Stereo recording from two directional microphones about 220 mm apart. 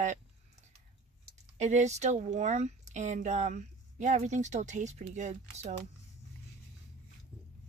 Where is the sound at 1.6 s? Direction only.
35° right (ahead or behind).